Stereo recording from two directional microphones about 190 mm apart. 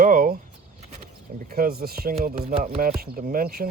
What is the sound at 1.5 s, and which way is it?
Speech, 55° right (ahead or behind).